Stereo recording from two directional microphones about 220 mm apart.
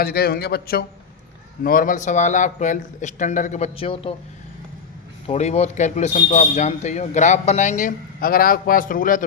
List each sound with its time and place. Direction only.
0.0 s a man's voice: 45° left (ahead or behind); by 4.1 s 25° left (ahead or behind)
5.2 s speech: 30° left (ahead or behind)